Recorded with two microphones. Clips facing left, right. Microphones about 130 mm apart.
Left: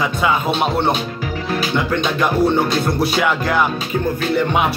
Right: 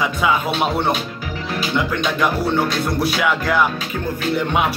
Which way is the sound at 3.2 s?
5° right (ahead or behind).